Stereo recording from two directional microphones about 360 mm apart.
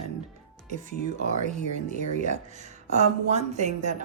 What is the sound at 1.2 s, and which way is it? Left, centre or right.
A woman's voice, right.